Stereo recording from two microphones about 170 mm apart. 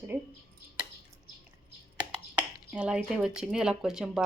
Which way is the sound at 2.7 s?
5° right (ahead or behind).